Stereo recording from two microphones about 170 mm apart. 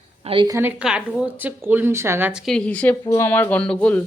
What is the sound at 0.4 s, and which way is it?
Speech, 20° right (ahead or behind).